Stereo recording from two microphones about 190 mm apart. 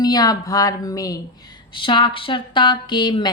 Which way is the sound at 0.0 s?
20° left (ahead or behind).